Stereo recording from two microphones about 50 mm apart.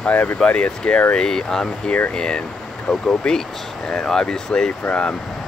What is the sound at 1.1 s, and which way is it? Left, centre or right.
Speech, centre.